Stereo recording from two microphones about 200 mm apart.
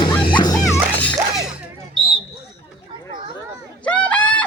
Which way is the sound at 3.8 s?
5° left (ahead or behind).